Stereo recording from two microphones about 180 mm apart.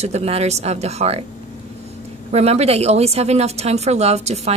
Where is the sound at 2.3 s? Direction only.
35° right (ahead or behind).